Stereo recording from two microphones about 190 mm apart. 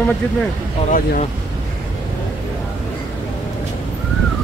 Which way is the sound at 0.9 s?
45° left (ahead or behind).